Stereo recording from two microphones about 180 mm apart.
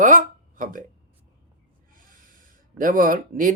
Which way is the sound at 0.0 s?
50° right (ahead or behind).